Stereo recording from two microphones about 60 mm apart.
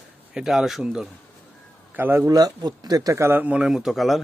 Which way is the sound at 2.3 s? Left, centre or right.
Right.